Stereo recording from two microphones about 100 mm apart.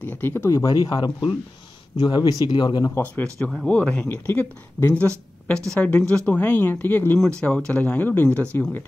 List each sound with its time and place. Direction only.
0.0 s speech: 20° left (ahead or behind)
0.5 s speech: 35° left (ahead or behind)
2.9 s speech: 15° left (ahead or behind)
3.3 s speech: 5° left (ahead or behind)
4.1 s speech: 25° left (ahead or behind)
5.8 s speech: 15° left (ahead or behind)